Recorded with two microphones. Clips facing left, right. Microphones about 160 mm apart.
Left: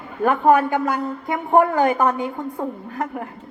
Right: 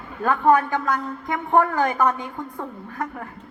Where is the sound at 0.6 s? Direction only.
10° left (ahead or behind).